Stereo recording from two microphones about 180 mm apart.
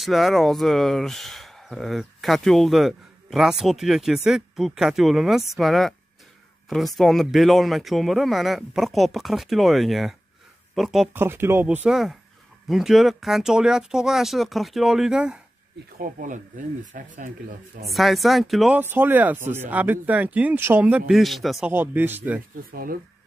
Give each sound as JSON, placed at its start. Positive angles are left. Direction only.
{"t": 0.0, "sound": "speech", "side_deg": 0}
{"t": 11.1, "sound": "speech", "side_deg": -15}
{"t": 16.0, "sound": "speech", "side_deg": -45}
{"t": 17.8, "sound": "speech", "side_deg": 0}
{"t": 18.8, "sound": "speech", "side_deg": -10}
{"t": 22.7, "sound": "speech", "side_deg": -55}